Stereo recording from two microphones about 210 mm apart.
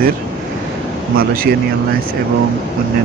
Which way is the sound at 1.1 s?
45° right (ahead or behind).